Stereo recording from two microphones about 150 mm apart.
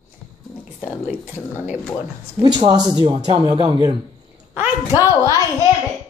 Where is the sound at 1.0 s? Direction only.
10° right (ahead or behind).